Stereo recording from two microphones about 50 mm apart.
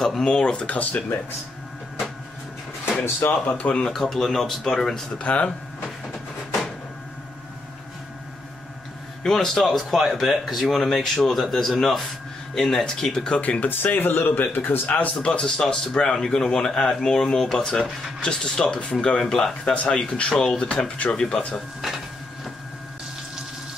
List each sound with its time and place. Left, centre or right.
0.0 s a sound: centre
0.3 s speech: centre
3.0 s speech: left
3.4 s speech: left
3.8 s speech: centre
5.2 s speech: left
9.2 s speech: centre
9.7 s speech: centre
13.4 s speech: left
13.7 s speech: left
15.1 s speech: centre
15.6 s speech: centre
15.9 s speech: centre
21.8 s dishes: centre